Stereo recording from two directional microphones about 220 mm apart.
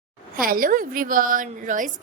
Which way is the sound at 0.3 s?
40° right (ahead or behind).